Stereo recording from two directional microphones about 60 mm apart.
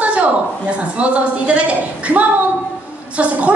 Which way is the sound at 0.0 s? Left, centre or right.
Right.